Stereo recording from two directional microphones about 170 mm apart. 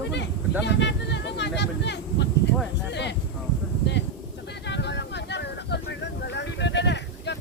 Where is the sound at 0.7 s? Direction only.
90° left.